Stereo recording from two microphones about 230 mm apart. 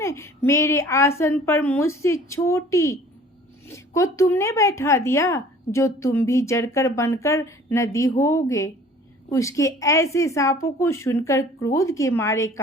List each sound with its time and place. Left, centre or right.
0.0 s a woman's voice: centre